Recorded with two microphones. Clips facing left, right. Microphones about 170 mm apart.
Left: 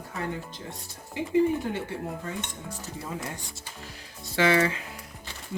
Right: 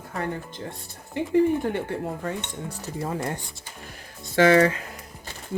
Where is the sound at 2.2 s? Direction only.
60° right (ahead or behind).